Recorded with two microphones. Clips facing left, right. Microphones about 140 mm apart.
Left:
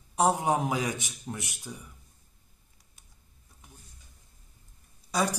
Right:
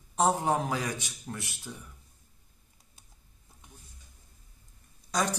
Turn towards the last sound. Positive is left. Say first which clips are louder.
# left 1 dB
turn(degrees=5)  # may be behind; listen again after turning